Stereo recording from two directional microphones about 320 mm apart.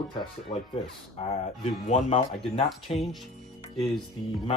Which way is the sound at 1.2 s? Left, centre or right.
Left.